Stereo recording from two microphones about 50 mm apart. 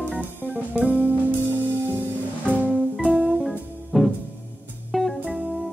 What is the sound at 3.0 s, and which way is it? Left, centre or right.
Music, centre.